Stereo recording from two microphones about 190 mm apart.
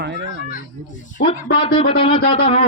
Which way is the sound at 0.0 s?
65° right (ahead or behind).